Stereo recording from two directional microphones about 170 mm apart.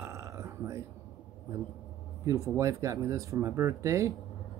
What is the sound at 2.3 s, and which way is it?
Speech, 20° right (ahead or behind).